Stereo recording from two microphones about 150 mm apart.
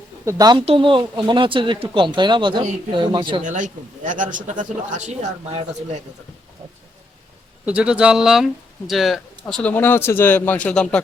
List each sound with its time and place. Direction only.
0.3 s speech: 25° right (ahead or behind)
0.6 s speech: 40° right (ahead or behind)
3.4 s speech: 55° right (ahead or behind)
5.5 s speech: 40° right (ahead or behind)
7.6 s speech: 5° right (ahead or behind); by 11.0 s 10° left (ahead or behind)